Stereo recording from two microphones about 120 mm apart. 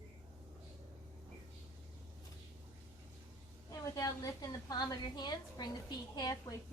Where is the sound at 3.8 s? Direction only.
30° left (ahead or behind).